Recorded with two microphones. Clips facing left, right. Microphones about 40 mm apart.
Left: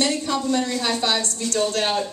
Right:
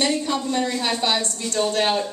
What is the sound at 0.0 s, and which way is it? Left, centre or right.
Speech, centre.